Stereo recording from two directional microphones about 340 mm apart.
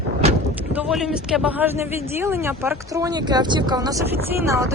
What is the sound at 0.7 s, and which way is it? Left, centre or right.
Speech, centre.